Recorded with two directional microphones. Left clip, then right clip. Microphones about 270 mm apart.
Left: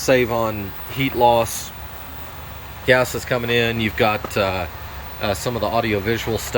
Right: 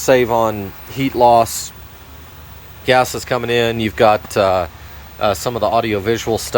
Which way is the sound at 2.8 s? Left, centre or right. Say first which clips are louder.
Right 3 dB; centre.